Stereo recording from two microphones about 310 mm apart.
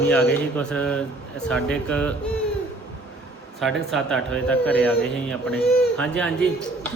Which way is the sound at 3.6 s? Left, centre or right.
Centre.